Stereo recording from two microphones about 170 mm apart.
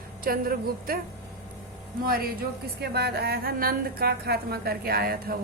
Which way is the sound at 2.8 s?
70° right (ahead or behind).